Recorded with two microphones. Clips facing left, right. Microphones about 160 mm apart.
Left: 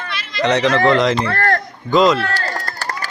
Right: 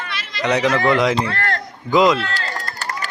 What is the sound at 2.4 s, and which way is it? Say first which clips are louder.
Chop: left 3 dB; 40° left (ahead or behind).